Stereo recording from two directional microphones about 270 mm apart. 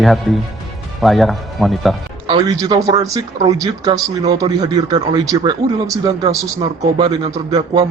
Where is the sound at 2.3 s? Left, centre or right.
Centre.